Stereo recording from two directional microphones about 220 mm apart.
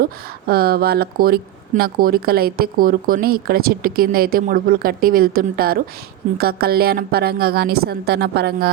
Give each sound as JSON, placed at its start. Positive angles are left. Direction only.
{"t": 0.0, "sound": "speech", "side_deg": -45}